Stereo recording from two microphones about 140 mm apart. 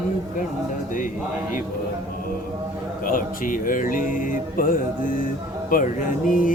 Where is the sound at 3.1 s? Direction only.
75° left (ahead or behind).